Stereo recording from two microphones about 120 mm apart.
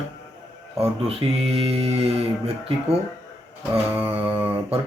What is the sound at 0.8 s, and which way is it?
Speech, 55° right (ahead or behind).